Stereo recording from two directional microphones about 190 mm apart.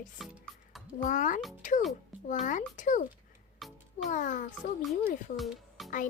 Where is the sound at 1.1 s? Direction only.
40° left (ahead or behind).